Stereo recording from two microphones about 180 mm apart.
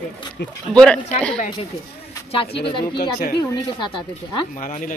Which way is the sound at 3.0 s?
55° left (ahead or behind).